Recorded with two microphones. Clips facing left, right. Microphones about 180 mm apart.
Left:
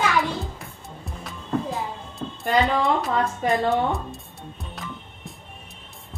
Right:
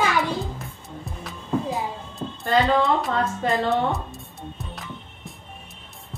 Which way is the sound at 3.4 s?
15° left (ahead or behind).